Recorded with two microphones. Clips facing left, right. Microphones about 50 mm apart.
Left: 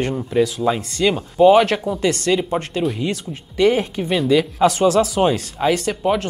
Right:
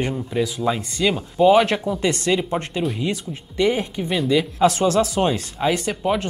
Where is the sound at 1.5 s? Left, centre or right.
Centre.